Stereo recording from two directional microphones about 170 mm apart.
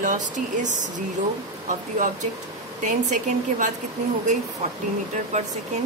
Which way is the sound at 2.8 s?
45° right (ahead or behind).